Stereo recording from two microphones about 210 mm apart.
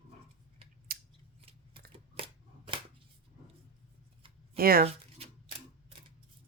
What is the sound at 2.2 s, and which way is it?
Shuffling cards, 25° right (ahead or behind).